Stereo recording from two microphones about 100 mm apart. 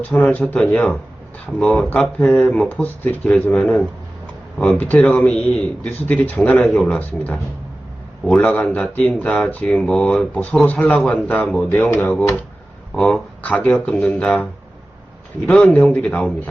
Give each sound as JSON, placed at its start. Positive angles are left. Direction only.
{"t": 0.0, "sound": "speech", "side_deg": 15}
{"t": 15.4, "sound": "speech", "side_deg": 15}